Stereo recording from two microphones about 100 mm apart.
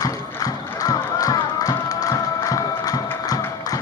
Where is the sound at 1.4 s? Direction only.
40° left (ahead or behind).